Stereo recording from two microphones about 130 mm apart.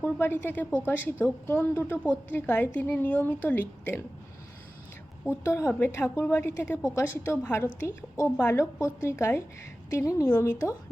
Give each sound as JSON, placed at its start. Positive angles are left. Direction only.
{"t": 0.0, "sound": "a woman's voice", "side_deg": 15}
{"t": 5.3, "sound": "a woman's voice", "side_deg": 20}